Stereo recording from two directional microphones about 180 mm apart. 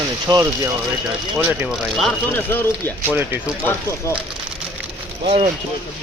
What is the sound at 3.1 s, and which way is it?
Speech, 10° right (ahead or behind).